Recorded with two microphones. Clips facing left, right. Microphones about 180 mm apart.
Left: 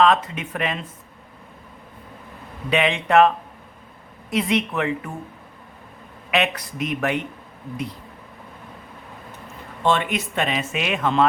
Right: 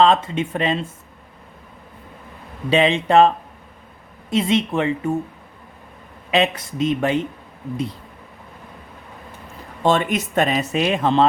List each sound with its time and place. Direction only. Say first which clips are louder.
0.0 s speech: right 2 dB; 30° right (ahead or behind)
2.6 s speech: right 4 dB; 30° right (ahead or behind)
6.3 s speech: right 3 dB; 30° right (ahead or behind)
9.8 s speech: right 3 dB; 40° right (ahead or behind)